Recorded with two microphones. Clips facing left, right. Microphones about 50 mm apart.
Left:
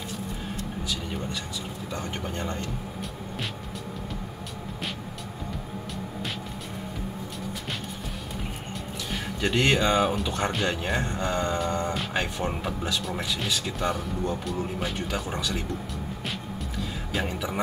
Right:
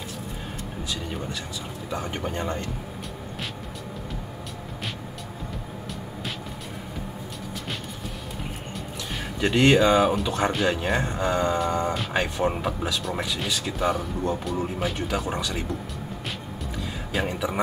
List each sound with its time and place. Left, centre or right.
1.9 s speech: centre
9.1 s speech: centre
17.1 s speech: centre